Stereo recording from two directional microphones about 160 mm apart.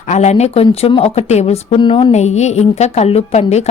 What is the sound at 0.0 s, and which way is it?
Speech, 45° left (ahead or behind).